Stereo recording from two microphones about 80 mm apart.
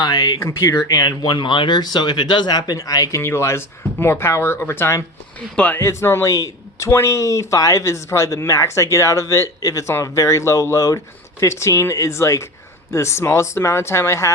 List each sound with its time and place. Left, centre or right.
0.0 s speech: left
0.4 s speech: left
0.9 s speech: left
3.2 s speech: left
5.8 s speech: left
6.2 s speech: left